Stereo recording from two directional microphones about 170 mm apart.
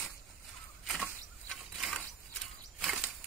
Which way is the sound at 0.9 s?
Centre (ahead or behind).